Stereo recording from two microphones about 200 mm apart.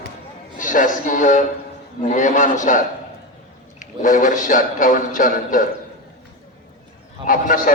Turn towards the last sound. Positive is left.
turn(degrees=40)  # may be behind; listen again after turning